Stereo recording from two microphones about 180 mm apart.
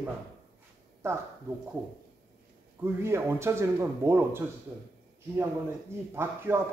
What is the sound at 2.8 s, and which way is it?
Speech, 15° right (ahead or behind).